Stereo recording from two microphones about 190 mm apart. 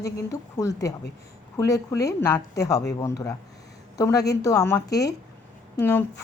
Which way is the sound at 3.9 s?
20° left (ahead or behind).